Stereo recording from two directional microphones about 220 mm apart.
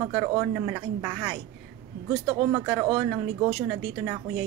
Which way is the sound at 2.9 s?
15° right (ahead or behind).